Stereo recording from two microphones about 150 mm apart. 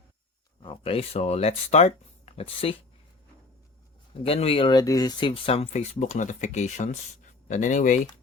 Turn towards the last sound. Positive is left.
turn(degrees=55)  # may be behind; listen again after turning